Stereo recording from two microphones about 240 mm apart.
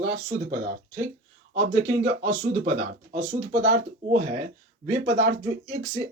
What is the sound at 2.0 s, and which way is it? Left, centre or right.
Speech, right.